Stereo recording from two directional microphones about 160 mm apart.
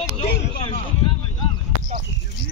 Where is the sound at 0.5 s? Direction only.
35° left (ahead or behind).